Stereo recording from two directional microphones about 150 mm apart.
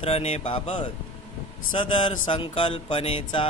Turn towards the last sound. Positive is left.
turn(degrees=35)  # may be behind; listen again after turning